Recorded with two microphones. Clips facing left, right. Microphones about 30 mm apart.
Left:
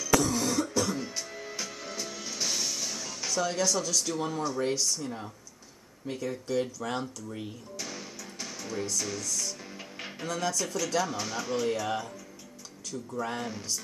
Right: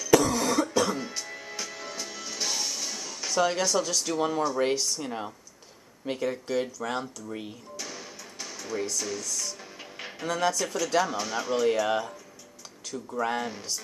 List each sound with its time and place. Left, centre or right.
0.3 s cough: right
0.9 s music: centre
3.3 s speech: right
4.6 s speech: right
6.0 s speech: right
6.4 s speech: centre
7.7 s music: centre
10.3 s speech: centre
11.9 s speech: centre
13.2 s speech: centre